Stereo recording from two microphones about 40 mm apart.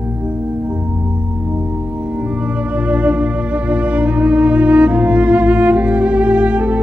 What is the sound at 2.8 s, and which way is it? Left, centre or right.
Music, right.